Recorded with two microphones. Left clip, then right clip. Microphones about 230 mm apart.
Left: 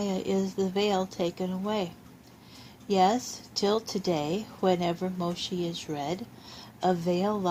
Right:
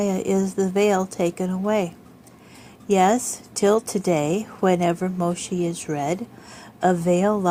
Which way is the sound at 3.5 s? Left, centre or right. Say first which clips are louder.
Right 8 dB; right.